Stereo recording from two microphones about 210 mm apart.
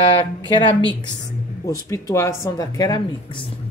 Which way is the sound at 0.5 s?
25° left (ahead or behind).